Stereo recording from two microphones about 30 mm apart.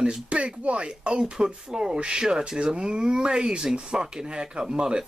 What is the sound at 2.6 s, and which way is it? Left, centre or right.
Speech, right.